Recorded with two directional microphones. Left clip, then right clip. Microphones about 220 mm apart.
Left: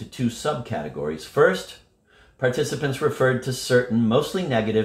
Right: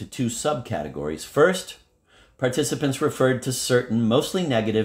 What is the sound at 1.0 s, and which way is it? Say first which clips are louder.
Speech: left 1 dB; 45° right (ahead or behind).